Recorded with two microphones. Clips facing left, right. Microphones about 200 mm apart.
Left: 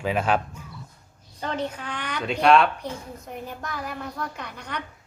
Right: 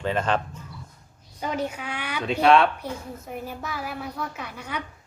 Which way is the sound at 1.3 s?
10° right (ahead or behind).